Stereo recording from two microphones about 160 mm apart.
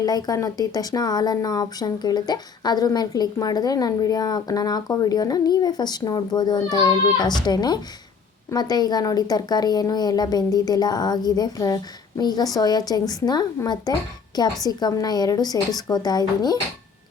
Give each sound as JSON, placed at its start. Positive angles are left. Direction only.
{"t": 0.0, "sound": "speech", "side_deg": 25}